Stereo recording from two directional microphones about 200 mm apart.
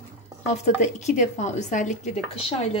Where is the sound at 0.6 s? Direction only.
35° left (ahead or behind).